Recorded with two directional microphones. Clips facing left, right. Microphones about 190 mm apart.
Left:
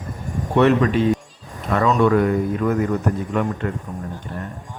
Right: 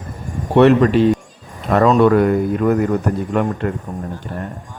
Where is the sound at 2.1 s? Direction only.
50° right (ahead or behind).